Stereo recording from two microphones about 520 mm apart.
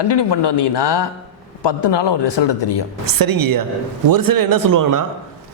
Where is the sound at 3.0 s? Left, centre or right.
Right.